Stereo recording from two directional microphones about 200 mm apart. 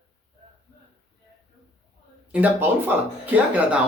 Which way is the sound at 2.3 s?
10° right (ahead or behind).